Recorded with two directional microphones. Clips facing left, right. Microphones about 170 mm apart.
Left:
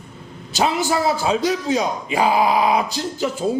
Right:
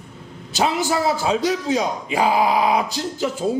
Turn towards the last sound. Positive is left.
turn(degrees=15)  # may be behind; listen again after turning